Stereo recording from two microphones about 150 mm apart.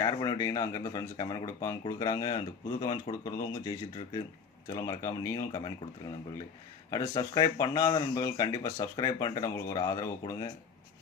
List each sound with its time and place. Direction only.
0.0 s speech: 25° left (ahead or behind)
7.1 s speech: 25° left (ahead or behind)